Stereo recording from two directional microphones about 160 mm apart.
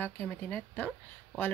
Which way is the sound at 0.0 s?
10° left (ahead or behind).